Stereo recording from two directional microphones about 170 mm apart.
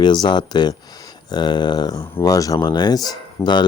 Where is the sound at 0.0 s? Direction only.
25° left (ahead or behind).